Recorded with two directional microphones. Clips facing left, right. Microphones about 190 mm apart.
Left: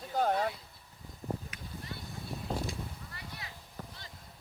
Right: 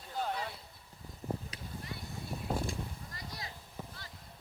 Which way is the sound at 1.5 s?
35° right (ahead or behind).